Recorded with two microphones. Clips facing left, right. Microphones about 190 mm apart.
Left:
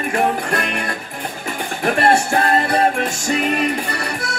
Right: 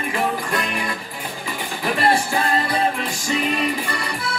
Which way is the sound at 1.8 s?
45° left (ahead or behind).